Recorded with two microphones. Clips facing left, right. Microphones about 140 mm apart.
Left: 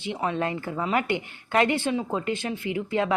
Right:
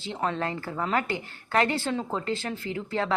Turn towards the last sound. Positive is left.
turn(degrees=20)  # may be behind; listen again after turning